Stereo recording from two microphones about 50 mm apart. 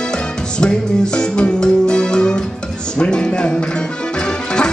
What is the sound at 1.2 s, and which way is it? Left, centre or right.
Music, centre.